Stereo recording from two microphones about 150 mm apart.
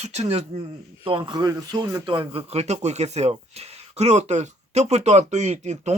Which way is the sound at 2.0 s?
35° right (ahead or behind).